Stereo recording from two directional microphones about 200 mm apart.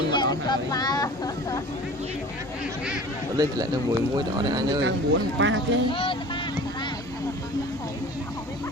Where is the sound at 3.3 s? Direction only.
20° right (ahead or behind).